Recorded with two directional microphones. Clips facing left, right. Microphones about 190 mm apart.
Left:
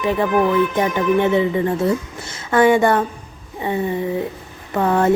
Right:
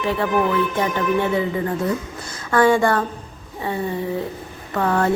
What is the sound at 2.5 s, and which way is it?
Speech, 20° left (ahead or behind).